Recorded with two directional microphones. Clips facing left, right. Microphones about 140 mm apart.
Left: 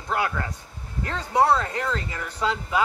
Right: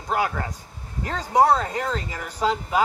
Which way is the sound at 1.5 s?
30° right (ahead or behind).